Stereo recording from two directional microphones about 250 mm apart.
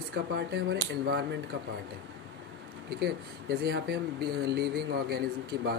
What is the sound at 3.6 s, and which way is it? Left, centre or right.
Speech, right.